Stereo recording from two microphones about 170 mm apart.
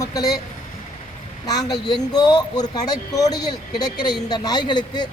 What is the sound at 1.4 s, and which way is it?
Speech, 25° left (ahead or behind).